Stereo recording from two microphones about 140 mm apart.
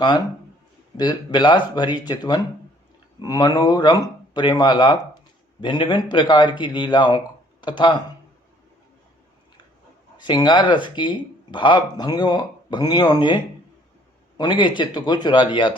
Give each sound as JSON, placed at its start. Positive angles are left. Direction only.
{"t": 0.9, "sound": "speech", "side_deg": 30}
{"t": 10.2, "sound": "speech", "side_deg": 30}